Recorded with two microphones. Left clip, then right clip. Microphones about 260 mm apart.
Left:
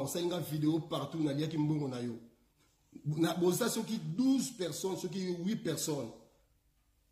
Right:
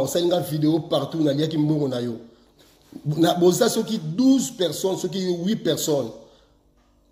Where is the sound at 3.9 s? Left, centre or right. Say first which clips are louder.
Right 12 dB; left.